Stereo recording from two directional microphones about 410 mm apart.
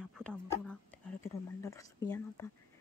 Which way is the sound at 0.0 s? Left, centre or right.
Centre.